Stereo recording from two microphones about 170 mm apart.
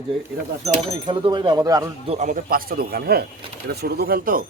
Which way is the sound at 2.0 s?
45° right (ahead or behind).